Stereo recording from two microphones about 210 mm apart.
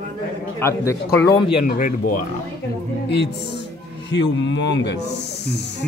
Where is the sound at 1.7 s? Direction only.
40° left (ahead or behind).